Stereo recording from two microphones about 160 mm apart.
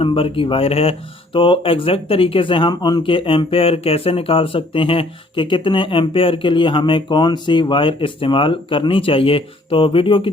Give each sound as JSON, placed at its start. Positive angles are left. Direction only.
{"t": 0.0, "sound": "speech", "side_deg": 35}